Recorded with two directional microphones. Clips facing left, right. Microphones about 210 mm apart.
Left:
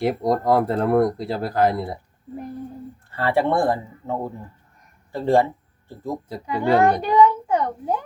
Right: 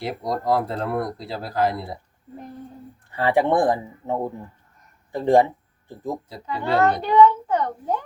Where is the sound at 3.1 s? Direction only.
15° right (ahead or behind).